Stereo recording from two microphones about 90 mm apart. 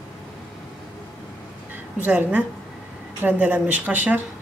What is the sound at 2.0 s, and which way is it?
A woman's voice, 20° right (ahead or behind).